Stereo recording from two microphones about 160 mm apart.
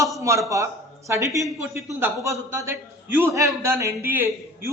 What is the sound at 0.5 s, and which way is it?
A man's voice, 20° right (ahead or behind).